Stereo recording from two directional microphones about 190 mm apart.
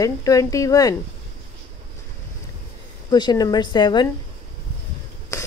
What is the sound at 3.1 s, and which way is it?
Speech, 20° left (ahead or behind).